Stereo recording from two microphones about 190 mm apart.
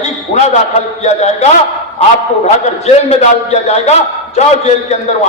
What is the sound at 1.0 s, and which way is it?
A man's voice, 35° left (ahead or behind).